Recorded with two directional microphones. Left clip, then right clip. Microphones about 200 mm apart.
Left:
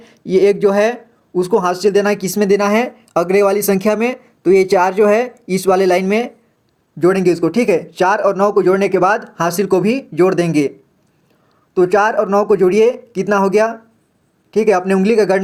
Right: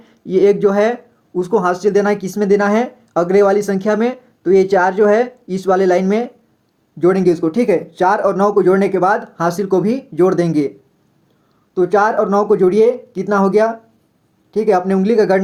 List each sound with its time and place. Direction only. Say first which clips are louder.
0.5 s speech: even; 25° left (ahead or behind)
11.7 s speech: left 1 dB; 25° left (ahead or behind)